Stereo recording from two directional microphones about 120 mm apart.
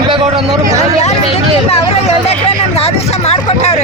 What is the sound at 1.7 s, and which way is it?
Speech, 55° left (ahead or behind).